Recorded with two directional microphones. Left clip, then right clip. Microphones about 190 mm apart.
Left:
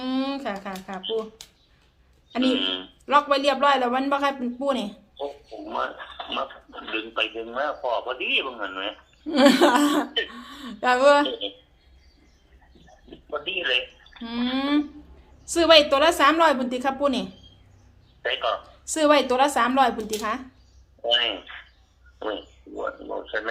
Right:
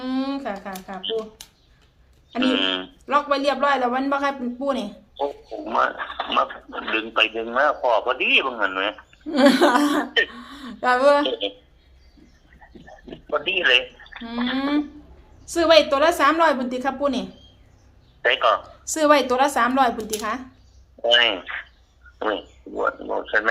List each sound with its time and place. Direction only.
0.0 s speech: 10° left (ahead or behind)
1.4 s a sound: 30° right (ahead or behind)
2.4 s speech: 55° right (ahead or behind)
3.1 s a man's voice: 10° left (ahead or behind)
5.1 s speech: 55° right (ahead or behind)
9.2 s a woman's voice: 10° left (ahead or behind)
11.3 s speech: 55° right (ahead or behind)
12.8 s a sound: 55° right (ahead or behind)
14.3 s a man's voice: 10° left (ahead or behind)
18.2 s a man's voice: 55° right (ahead or behind)
18.6 s a woman's voice: centre (ahead or behind)
21.0 s speech: 55° right (ahead or behind)